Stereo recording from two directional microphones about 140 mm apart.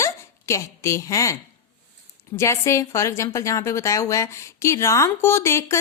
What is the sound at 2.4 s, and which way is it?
Speech, 20° left (ahead or behind).